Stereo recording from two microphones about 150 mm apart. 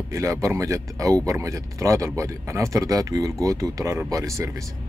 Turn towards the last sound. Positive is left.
turn(degrees=-20)  # may be behind; listen again after turning